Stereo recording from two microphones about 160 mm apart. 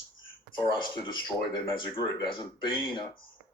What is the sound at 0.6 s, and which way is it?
Speech, 30° left (ahead or behind).